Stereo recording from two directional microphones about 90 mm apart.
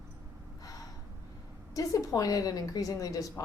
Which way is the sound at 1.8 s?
40° left (ahead or behind).